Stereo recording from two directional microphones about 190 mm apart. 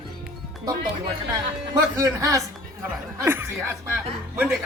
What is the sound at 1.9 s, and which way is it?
A man's voice, 15° right (ahead or behind).